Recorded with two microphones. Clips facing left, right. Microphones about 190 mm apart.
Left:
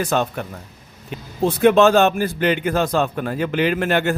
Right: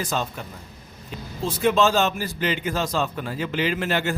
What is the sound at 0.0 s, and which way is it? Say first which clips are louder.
Speech: left 7 dB; 60° left (ahead or behind).